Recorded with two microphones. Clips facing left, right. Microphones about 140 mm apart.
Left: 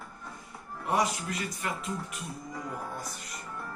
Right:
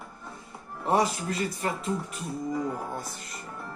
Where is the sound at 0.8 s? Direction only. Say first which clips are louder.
Right 4 dB; 30° right (ahead or behind).